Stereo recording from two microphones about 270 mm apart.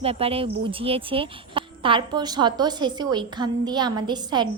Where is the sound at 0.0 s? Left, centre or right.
Right.